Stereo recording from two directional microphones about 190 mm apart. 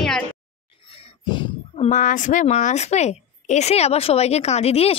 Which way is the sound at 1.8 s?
40° left (ahead or behind).